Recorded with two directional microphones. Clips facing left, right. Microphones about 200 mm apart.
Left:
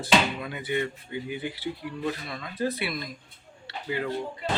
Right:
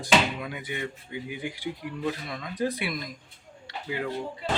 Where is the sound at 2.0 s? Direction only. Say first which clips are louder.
Right 1 dB; centre (ahead or behind).